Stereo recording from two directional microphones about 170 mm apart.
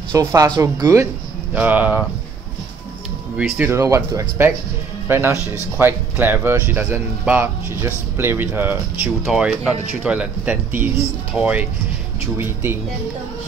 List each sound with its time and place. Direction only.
0.1 s speech: 20° right (ahead or behind)
3.3 s speech: 10° right (ahead or behind)